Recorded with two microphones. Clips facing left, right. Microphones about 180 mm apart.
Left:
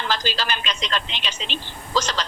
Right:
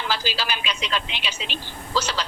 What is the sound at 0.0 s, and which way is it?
A woman's voice, 10° right (ahead or behind).